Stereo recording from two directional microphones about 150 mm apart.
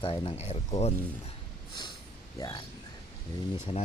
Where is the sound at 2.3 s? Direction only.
25° left (ahead or behind).